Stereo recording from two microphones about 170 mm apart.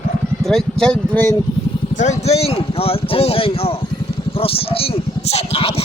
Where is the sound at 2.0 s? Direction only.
40° left (ahead or behind).